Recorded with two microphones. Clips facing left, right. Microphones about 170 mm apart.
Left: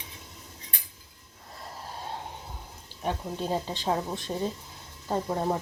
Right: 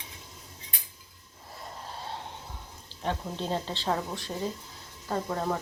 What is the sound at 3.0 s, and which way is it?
Speech, 10° left (ahead or behind).